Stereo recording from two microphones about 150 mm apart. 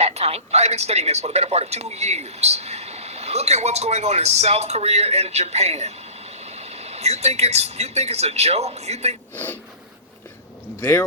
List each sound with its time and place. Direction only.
0.0 s speech: 45° right (ahead or behind)
10.8 s speech: 15° left (ahead or behind)